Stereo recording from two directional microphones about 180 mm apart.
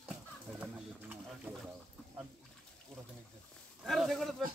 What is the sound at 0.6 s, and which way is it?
Bird, 5° right (ahead or behind).